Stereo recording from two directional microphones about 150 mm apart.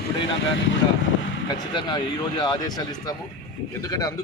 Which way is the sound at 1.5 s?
30° left (ahead or behind).